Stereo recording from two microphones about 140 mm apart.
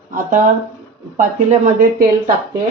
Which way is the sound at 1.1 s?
65° right (ahead or behind).